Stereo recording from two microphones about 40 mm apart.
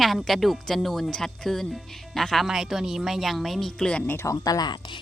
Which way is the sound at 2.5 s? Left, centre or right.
Centre.